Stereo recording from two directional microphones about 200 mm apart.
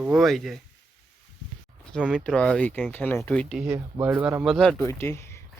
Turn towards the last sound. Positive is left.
turn(degrees=10)  # may be behind; listen again after turning